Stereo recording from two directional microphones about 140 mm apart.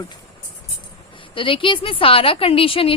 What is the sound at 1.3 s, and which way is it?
Speech, 40° left (ahead or behind).